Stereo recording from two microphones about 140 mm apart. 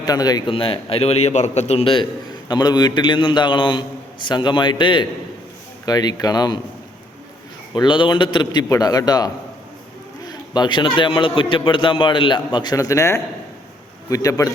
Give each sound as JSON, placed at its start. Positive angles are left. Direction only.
{"t": 0.0, "sound": "speech", "side_deg": 25}
{"t": 0.5, "sound": "a man's voice", "side_deg": 40}
{"t": 2.5, "sound": "a man's voice", "side_deg": 30}
{"t": 7.8, "sound": "a man's voice", "side_deg": 35}